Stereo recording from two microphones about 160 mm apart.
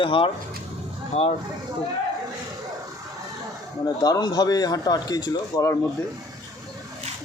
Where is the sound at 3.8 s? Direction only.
25° left (ahead or behind).